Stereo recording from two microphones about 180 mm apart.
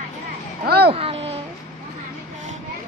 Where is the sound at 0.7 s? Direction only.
60° right (ahead or behind).